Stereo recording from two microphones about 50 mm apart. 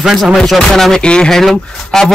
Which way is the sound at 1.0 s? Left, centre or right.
Centre.